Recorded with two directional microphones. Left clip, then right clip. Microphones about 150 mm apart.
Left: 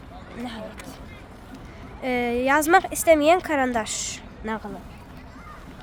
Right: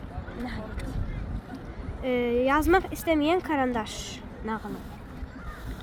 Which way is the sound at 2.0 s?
50° left (ahead or behind).